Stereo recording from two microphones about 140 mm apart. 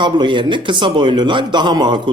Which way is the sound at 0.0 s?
35° right (ahead or behind).